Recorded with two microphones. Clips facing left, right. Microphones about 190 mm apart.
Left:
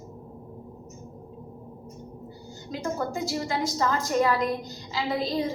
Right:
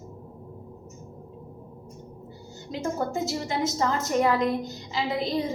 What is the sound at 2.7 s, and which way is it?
A woman's voice, 20° right (ahead or behind).